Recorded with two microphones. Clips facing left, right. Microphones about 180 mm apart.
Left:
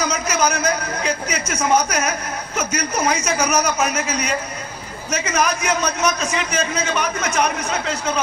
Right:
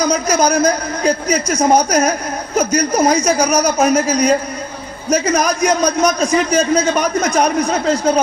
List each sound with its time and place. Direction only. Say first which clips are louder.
0.0 s a man's voice: right 6 dB; 35° right (ahead or behind)